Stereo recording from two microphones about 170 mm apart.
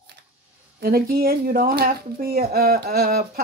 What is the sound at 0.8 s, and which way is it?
Speech, 60° right (ahead or behind).